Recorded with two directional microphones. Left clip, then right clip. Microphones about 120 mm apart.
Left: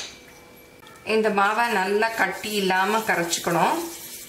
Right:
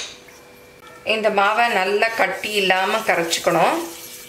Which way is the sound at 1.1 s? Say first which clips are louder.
Right 3 dB; 20° right (ahead or behind).